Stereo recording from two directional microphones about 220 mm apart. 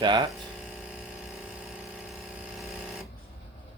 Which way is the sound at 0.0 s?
20° right (ahead or behind).